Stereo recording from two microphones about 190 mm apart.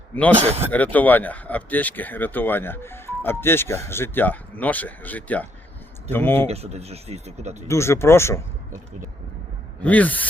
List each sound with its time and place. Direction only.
0.3 s speech: 35° right (ahead or behind)
0.7 s speech: 10° left (ahead or behind)
6.5 s speech: 35° right (ahead or behind)
7.7 s speech: 15° left (ahead or behind)
9.8 s speech: 10° left (ahead or behind)